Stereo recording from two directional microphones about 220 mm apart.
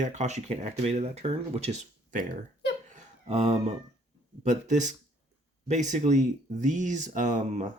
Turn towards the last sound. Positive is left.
turn(degrees=-35)  # may be behind; listen again after turning